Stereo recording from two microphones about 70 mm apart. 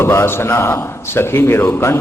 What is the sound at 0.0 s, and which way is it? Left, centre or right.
Speech, left.